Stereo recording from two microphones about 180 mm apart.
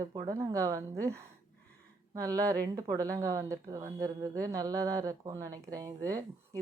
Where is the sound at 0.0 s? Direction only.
20° right (ahead or behind).